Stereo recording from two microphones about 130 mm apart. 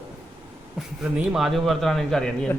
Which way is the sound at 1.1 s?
5° right (ahead or behind).